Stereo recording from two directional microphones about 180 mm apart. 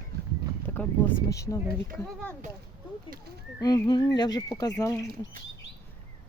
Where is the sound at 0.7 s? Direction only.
10° left (ahead or behind).